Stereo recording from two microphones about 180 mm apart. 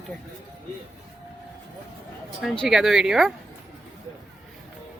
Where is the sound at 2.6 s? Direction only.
Centre (ahead or behind).